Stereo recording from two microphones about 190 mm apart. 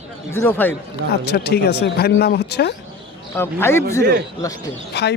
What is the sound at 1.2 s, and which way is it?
Speech, 60° left (ahead or behind).